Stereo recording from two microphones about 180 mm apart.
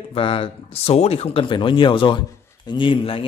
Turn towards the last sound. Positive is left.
turn(degrees=30)  # may be behind; listen again after turning